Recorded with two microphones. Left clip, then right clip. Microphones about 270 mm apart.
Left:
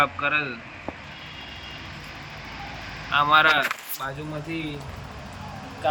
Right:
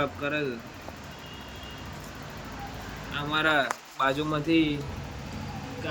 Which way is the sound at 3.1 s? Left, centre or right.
Centre.